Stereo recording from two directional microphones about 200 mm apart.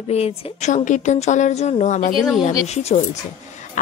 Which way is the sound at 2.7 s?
35° left (ahead or behind).